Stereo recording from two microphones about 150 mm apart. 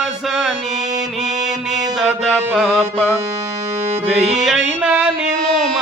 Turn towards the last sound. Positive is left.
turn(degrees=-5)  # may be behind; listen again after turning